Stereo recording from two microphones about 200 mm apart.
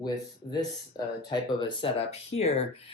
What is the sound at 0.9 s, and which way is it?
Speech, 20° left (ahead or behind).